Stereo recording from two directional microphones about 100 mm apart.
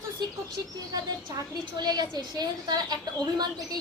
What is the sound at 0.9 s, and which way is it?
A woman's voice, 40° right (ahead or behind).